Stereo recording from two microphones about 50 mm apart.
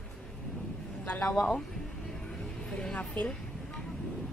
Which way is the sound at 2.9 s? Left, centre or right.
Left.